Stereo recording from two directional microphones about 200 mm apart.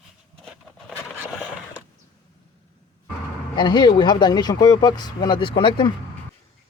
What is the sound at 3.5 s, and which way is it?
Speech, 20° left (ahead or behind).